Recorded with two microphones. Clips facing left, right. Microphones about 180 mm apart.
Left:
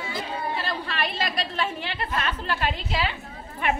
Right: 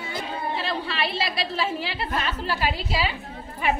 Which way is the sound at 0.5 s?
Centre (ahead or behind).